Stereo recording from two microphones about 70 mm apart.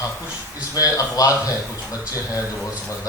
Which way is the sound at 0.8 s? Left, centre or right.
Left.